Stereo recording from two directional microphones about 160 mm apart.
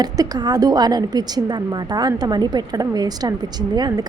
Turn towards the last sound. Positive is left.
turn(degrees=-25)  # may be behind; listen again after turning